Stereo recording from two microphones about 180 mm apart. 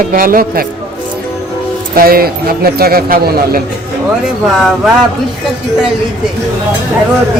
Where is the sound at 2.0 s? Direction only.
55° right (ahead or behind).